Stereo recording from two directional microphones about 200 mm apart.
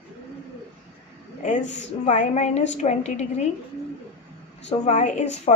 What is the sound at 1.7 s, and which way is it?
A woman's voice, 35° left (ahead or behind).